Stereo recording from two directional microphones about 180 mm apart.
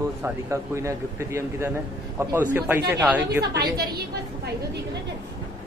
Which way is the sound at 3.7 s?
65° right (ahead or behind).